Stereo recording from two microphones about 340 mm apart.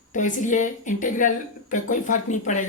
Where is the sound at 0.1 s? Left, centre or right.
Left.